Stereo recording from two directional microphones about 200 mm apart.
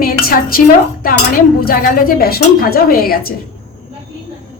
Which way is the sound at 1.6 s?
45° left (ahead or behind).